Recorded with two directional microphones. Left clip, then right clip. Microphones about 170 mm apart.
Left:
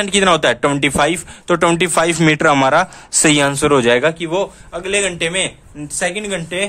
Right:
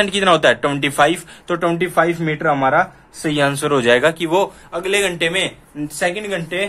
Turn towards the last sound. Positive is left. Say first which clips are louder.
# left 1 dB
turn(degrees=40)  # may be behind; listen again after turning